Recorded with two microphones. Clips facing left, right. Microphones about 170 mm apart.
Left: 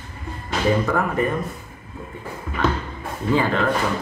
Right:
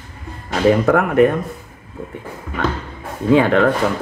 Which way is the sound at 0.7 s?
70° right (ahead or behind).